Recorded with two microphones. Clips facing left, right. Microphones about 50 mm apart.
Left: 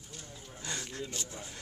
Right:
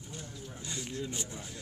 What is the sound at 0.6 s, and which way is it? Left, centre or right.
Speech, left.